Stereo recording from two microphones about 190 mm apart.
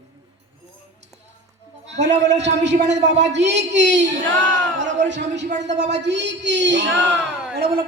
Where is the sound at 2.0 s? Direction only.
35° right (ahead or behind).